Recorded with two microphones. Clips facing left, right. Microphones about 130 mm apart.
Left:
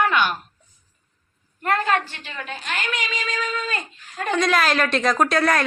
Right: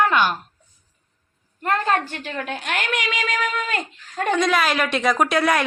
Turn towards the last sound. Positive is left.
turn(degrees=-10)  # may be behind; listen again after turning